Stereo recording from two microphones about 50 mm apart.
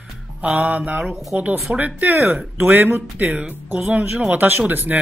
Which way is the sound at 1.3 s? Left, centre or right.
Right.